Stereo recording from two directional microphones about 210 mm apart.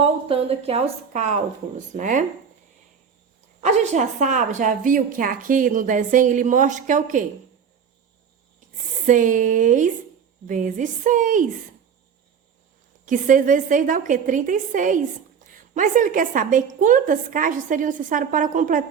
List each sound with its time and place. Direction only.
0.0 s a woman's voice: 25° right (ahead or behind)
3.6 s a woman's voice: 35° right (ahead or behind)
9.0 s a woman's voice: 40° right (ahead or behind)
13.1 s a woman's voice: 40° right (ahead or behind)